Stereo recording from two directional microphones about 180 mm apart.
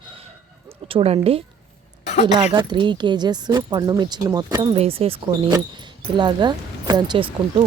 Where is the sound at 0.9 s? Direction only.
30° right (ahead or behind).